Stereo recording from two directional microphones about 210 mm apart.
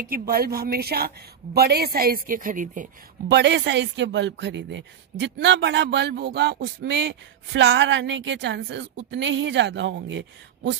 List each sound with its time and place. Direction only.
0.0 s speech: 45° right (ahead or behind)
3.3 s speech: 55° right (ahead or behind)